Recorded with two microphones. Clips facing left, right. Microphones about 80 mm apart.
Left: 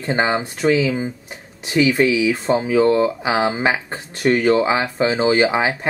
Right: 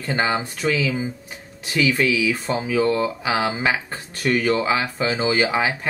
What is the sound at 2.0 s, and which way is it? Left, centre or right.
Speech, left.